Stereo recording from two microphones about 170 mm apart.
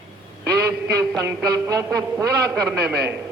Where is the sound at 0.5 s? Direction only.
20° right (ahead or behind).